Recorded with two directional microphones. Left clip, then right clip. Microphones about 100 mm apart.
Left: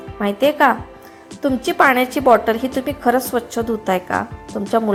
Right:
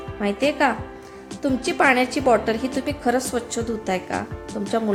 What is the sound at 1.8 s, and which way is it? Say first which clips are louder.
Speech: left 4 dB; 10° left (ahead or behind).